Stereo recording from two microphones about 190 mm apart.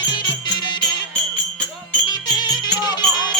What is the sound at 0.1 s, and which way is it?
Music, 25° left (ahead or behind).